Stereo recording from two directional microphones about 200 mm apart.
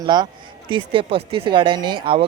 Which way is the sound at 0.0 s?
20° right (ahead or behind).